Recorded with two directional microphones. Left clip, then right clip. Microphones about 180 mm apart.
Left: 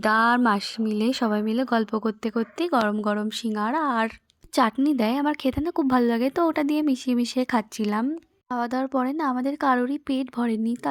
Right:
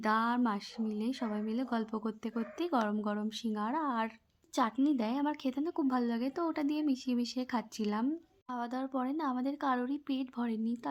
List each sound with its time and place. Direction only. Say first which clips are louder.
0.0 s speech: left 11 dB; 35° left (ahead or behind)